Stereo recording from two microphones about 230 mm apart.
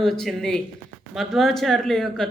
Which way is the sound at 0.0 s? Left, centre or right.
Centre.